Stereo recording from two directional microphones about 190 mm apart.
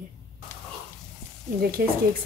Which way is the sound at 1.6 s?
55° right (ahead or behind).